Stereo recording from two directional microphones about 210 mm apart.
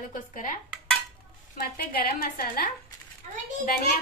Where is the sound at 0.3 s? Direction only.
40° left (ahead or behind).